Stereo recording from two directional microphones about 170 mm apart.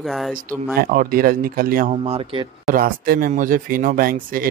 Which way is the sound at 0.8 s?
55° right (ahead or behind).